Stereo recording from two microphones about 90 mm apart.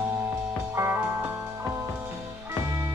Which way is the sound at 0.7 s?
25° right (ahead or behind).